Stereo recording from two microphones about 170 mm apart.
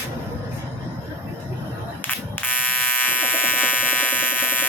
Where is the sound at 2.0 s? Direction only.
10° left (ahead or behind).